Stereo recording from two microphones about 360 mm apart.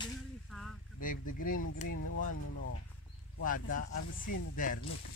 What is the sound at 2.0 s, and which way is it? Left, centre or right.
Speech, left.